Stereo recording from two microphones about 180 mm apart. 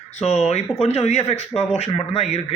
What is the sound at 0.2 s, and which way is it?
Speech, 40° left (ahead or behind).